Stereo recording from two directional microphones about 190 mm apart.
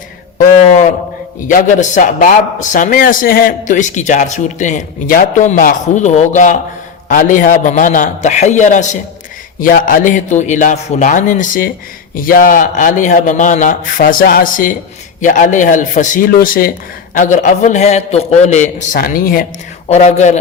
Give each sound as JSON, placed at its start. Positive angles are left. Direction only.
{"t": 0.5, "sound": "a sound", "side_deg": 35}
{"t": 1.5, "sound": "a man's voice", "side_deg": 40}
{"t": 19.9, "sound": "speech", "side_deg": 35}